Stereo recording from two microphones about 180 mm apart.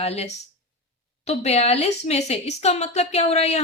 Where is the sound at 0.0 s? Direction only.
35° left (ahead or behind).